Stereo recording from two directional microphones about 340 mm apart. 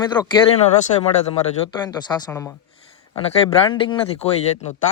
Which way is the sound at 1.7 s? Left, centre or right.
Centre.